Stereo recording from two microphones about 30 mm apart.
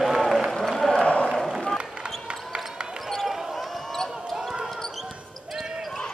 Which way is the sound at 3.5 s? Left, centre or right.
Centre.